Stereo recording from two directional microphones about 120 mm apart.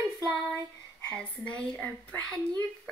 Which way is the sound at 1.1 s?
10° left (ahead or behind).